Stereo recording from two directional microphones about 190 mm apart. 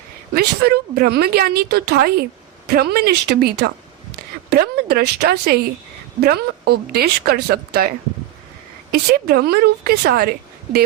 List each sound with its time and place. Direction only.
0.3 s a woman's voice: 55° right (ahead or behind)